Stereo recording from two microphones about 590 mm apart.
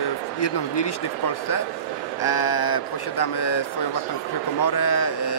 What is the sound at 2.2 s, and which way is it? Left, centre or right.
Speech, left.